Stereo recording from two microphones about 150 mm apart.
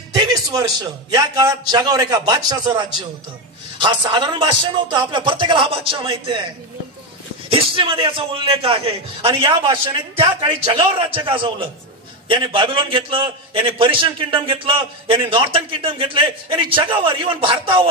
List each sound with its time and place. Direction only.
0.1 s music: 25° right (ahead or behind)
1.1 s a man's voice: 25° right (ahead or behind)
7.4 s a man's voice: 35° right (ahead or behind)